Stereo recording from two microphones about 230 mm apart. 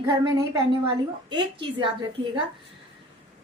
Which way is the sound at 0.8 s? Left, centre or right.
Right.